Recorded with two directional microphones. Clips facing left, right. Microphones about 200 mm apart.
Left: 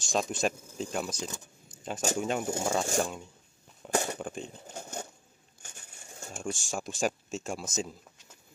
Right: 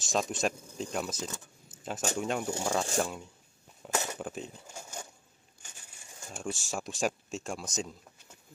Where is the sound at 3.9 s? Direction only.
35° left (ahead or behind).